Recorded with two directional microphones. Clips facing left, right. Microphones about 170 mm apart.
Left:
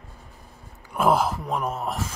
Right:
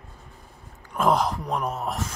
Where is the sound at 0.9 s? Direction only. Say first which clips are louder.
Left 1 dB; 5° left (ahead or behind).